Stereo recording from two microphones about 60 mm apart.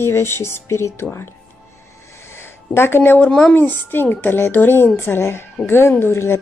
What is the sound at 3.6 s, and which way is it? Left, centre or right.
A woman's voice, left.